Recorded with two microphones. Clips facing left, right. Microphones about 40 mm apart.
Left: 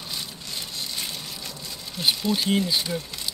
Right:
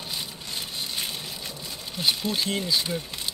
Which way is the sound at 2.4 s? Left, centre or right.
Centre.